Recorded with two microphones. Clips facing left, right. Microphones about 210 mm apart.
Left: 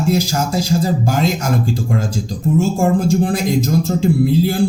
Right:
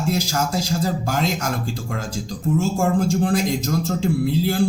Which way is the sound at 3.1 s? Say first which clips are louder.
Left 3 dB; 10° left (ahead or behind).